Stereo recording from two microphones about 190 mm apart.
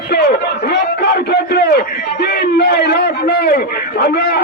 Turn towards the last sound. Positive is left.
turn(degrees=55)  # may be behind; listen again after turning